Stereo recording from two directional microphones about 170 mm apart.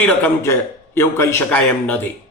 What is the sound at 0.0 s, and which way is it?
A man's voice, 10° left (ahead or behind).